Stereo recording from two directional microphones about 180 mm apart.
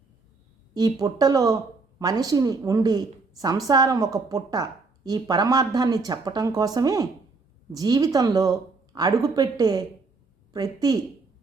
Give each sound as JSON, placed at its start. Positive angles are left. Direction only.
{"t": 0.7, "sound": "a woman's voice", "side_deg": -20}